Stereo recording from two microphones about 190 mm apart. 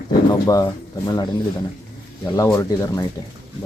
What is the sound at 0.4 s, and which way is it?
Speech, 20° left (ahead or behind).